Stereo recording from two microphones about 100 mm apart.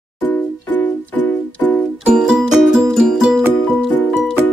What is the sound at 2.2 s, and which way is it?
Music, 5° right (ahead or behind).